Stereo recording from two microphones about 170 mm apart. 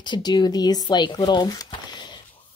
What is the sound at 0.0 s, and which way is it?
Speech, 25° left (ahead or behind).